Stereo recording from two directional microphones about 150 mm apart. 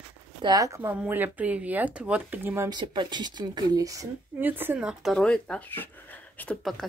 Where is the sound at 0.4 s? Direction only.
25° right (ahead or behind).